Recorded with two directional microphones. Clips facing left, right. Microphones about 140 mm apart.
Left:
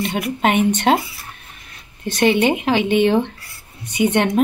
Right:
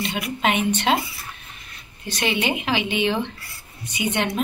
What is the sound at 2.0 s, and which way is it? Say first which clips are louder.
A woman's voice: left 8 dB; 55° left (ahead or behind).